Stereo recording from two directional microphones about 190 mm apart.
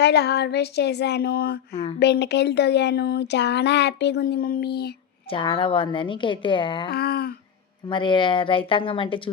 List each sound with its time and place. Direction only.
0.0 s speech: 60° left (ahead or behind)
1.7 s speech: 35° left (ahead or behind)
2.0 s speech: 65° left (ahead or behind)
5.3 s a woman's voice: 25° left (ahead or behind)
6.9 s speech: 55° left (ahead or behind)
7.9 s a woman's voice: 25° left (ahead or behind)